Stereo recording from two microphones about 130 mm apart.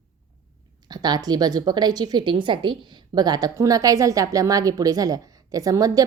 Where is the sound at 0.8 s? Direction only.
30° right (ahead or behind).